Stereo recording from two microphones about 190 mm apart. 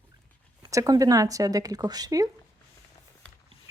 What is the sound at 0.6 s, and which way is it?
Speech, 20° right (ahead or behind).